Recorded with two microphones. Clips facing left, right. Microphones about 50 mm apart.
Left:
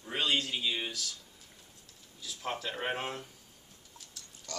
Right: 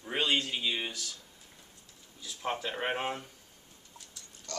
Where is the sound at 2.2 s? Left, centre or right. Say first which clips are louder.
Right 2 dB; centre.